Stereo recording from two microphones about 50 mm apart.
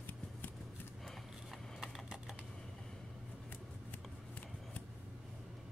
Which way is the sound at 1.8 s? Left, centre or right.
Centre.